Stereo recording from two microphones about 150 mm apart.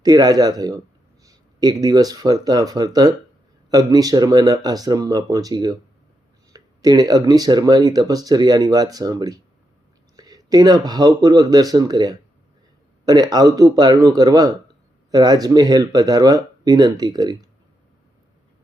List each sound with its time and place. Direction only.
0.0 s speech: 25° right (ahead or behind)